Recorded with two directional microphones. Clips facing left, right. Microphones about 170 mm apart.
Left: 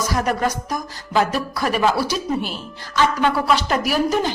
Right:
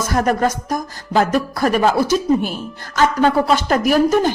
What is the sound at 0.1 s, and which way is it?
Speech, 45° right (ahead or behind).